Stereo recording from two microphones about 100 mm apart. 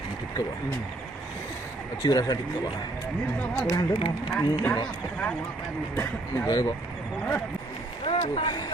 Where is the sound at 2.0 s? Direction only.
40° left (ahead or behind).